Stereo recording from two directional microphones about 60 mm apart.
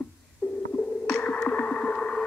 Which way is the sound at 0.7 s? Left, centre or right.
Centre.